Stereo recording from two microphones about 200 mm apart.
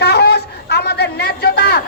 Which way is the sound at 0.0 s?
55° left (ahead or behind).